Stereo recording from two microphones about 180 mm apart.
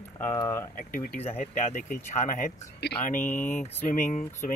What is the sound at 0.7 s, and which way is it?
Speech, 45° left (ahead or behind).